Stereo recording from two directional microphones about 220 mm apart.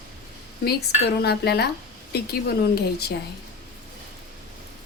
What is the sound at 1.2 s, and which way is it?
A woman's voice, 45° left (ahead or behind).